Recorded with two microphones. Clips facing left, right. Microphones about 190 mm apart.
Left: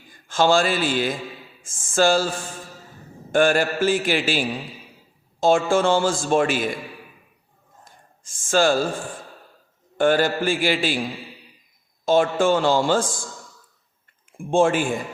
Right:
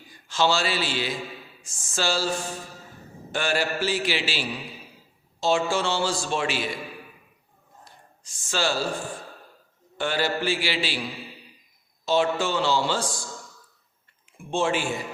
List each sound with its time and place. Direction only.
0.1 s a man's voice: 50° left (ahead or behind)
7.9 s a man's voice: 50° left (ahead or behind)
14.3 s a man's voice: 50° left (ahead or behind)